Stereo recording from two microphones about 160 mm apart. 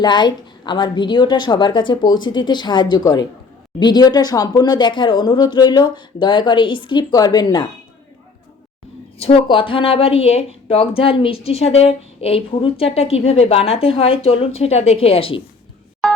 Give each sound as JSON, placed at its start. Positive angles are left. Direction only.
{"t": 0.0, "sound": "speech", "side_deg": 25}
{"t": 9.1, "sound": "speech", "side_deg": 35}